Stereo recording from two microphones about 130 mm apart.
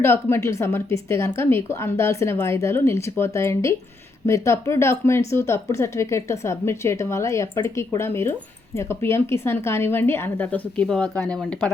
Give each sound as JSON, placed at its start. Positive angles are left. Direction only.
{"t": 0.0, "sound": "a woman's voice", "side_deg": 20}